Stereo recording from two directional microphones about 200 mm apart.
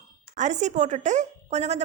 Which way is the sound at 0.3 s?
35° right (ahead or behind).